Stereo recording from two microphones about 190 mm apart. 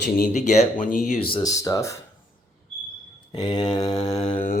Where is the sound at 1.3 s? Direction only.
20° left (ahead or behind).